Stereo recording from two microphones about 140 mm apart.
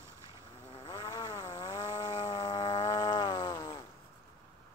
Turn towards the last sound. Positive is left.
turn(degrees=20)  # may be behind; listen again after turning